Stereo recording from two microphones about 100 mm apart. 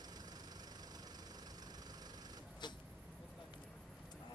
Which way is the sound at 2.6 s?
50° left (ahead or behind).